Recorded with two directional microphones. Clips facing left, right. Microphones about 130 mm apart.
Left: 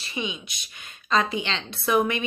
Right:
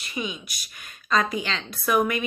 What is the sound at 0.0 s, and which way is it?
Speech, 25° left (ahead or behind).